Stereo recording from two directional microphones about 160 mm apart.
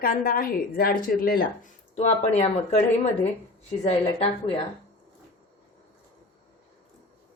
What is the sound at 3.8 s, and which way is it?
Speech, 40° left (ahead or behind).